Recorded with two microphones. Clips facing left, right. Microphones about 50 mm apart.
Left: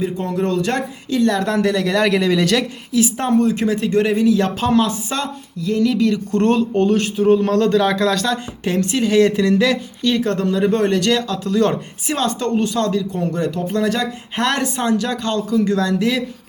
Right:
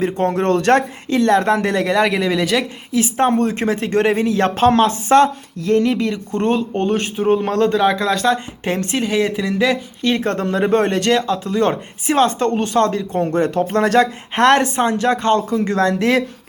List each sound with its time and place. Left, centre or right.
0.0 s speech: right
1.1 s speech: right
1.9 s speech: centre
2.9 s a woman's voice: right
5.8 s speech: right
6.3 s speech: centre
6.7 s speech: right
9.0 s speech: centre
10.0 s speech: right
12.1 s speech: right